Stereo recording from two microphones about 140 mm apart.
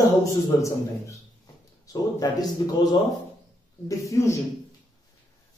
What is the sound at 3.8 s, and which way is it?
Speech, 20° left (ahead or behind).